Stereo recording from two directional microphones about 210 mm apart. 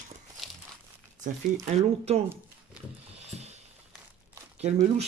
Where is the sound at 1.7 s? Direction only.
30° right (ahead or behind).